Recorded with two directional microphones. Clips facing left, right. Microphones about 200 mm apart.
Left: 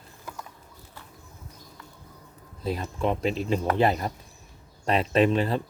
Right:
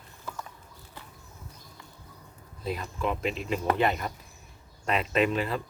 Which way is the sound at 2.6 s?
35° left (ahead or behind).